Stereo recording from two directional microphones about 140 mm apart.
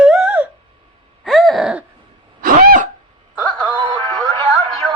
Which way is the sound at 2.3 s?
90° right.